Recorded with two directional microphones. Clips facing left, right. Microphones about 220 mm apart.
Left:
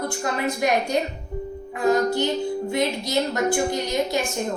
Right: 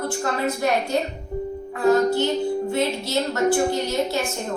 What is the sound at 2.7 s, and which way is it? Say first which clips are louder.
A woman's voice: even; 15° left (ahead or behind).